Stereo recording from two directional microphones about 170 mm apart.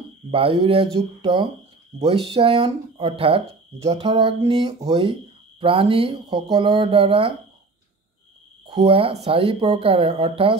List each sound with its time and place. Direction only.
0.3 s speech: 30° right (ahead or behind)
8.6 s speech: 30° right (ahead or behind)